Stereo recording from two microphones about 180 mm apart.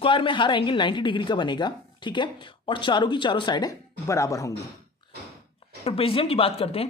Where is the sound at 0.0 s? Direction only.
25° left (ahead or behind).